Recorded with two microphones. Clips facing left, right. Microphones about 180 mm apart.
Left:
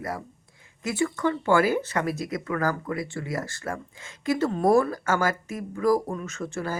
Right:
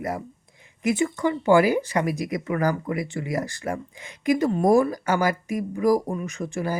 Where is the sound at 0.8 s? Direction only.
20° right (ahead or behind).